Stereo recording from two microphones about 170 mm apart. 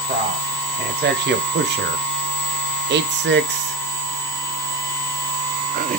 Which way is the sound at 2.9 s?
90° right.